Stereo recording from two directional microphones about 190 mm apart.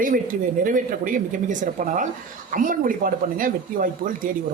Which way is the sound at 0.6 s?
45° right (ahead or behind).